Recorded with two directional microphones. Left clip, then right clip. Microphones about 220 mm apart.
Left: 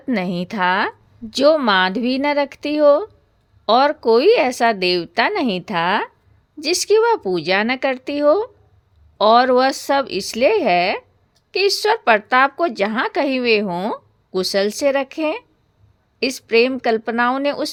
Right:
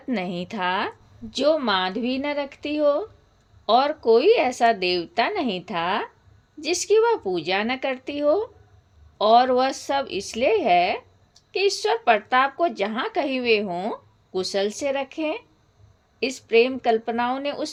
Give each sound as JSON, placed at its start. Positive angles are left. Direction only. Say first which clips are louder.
{"t": 0.1, "sound": "speech", "louder": "left 5 dB", "side_deg": 45}